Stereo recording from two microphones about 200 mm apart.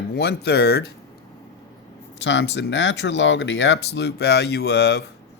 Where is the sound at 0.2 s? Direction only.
55° left (ahead or behind).